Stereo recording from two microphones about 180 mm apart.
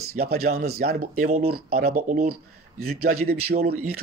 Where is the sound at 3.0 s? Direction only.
55° right (ahead or behind).